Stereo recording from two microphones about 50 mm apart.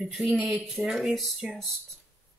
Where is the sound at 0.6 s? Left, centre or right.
Centre.